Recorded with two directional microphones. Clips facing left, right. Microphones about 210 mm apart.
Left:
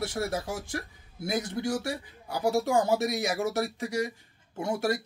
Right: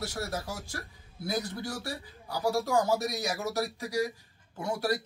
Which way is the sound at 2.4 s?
25° left (ahead or behind).